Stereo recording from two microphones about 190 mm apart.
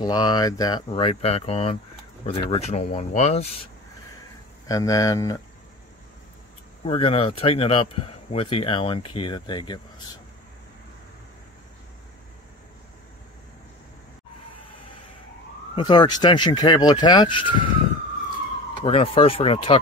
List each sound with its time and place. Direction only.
0.0 s speech: 20° left (ahead or behind)
4.6 s speech: 15° left (ahead or behind)
6.8 s speech: 30° left (ahead or behind)
15.7 s speech: 25° left (ahead or behind)
18.9 s speech: 30° left (ahead or behind)